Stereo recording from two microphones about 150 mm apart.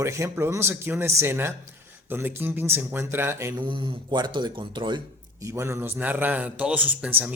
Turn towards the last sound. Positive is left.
turn(degrees=-10)  # may be behind; listen again after turning